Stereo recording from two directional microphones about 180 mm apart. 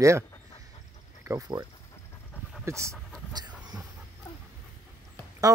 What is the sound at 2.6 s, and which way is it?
Speech, 15° right (ahead or behind).